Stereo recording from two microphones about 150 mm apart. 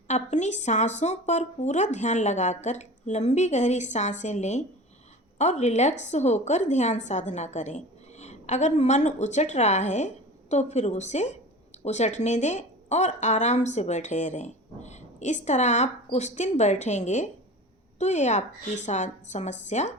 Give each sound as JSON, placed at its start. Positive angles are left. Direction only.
{"t": 0.1, "sound": "a woman's voice", "side_deg": 50}